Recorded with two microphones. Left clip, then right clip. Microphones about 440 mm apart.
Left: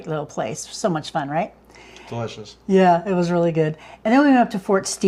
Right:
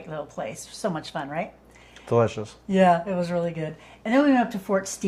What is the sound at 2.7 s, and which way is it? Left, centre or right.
A woman's voice, left.